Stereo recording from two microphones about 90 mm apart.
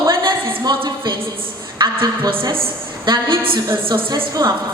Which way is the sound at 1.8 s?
45° right (ahead or behind).